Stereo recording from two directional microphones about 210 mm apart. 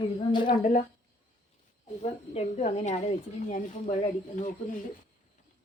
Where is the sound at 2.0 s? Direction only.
30° left (ahead or behind).